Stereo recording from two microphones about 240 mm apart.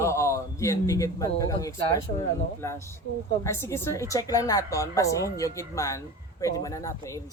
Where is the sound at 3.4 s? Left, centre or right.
Centre.